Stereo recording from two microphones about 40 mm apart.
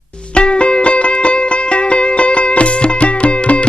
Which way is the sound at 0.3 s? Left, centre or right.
Left.